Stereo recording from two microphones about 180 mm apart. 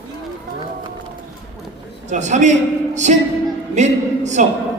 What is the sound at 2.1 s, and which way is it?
A man's voice, 40° right (ahead or behind).